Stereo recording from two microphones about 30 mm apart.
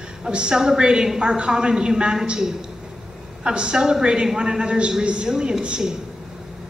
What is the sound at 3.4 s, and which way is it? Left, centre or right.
A woman's voice, right.